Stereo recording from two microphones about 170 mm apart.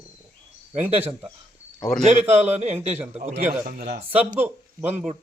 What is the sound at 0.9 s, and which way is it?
Speech, 10° right (ahead or behind).